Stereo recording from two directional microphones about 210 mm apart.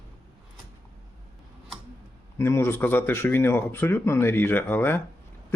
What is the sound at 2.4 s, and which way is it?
A man's voice, 10° left (ahead or behind).